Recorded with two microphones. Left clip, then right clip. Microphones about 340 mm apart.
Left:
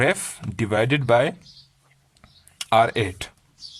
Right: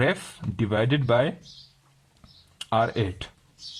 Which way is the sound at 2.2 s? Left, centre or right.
Left.